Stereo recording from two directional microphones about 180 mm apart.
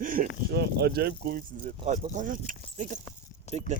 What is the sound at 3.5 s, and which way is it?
Speech, 40° left (ahead or behind).